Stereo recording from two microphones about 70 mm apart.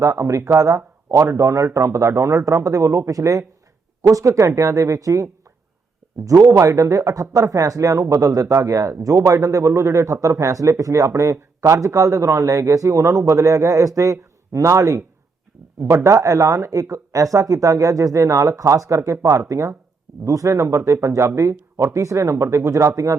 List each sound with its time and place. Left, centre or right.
0.0 s speech: right